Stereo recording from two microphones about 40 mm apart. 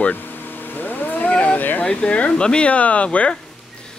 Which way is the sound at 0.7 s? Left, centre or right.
Left.